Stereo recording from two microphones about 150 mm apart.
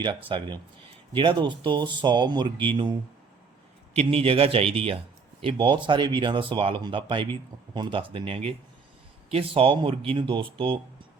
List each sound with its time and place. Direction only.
0.3 s speech: 35° right (ahead or behind)
3.9 s speech: 40° right (ahead or behind)